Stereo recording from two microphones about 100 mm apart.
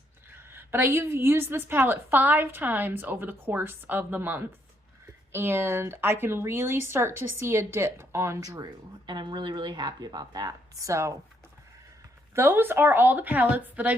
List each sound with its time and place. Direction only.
0.3 s a woman's voice: 20° right (ahead or behind)
9.0 s speech: 50° right (ahead or behind); by 11.2 s 30° right (ahead or behind)
12.3 s a woman's voice: 25° right (ahead or behind)